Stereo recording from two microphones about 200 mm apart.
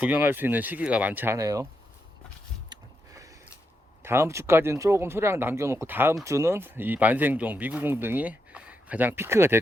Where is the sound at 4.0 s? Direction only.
10° right (ahead or behind).